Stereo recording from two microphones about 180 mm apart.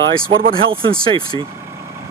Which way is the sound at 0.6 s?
30° right (ahead or behind).